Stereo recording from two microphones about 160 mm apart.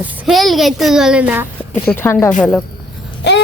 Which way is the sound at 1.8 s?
15° left (ahead or behind).